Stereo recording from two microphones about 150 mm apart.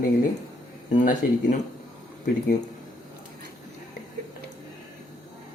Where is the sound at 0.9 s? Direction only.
55° left (ahead or behind).